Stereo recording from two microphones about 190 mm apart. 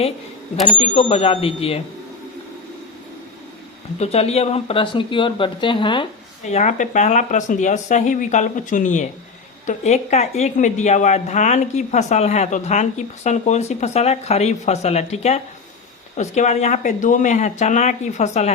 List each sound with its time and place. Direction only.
0.8 s a woman's voice: 30° left (ahead or behind)
4.0 s speech: 35° left (ahead or behind)
6.4 s a woman's voice: 40° left (ahead or behind)